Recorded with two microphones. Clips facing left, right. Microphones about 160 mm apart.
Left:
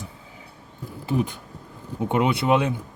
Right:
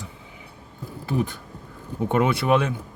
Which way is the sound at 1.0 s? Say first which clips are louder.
Left 1 dB; 15° left (ahead or behind).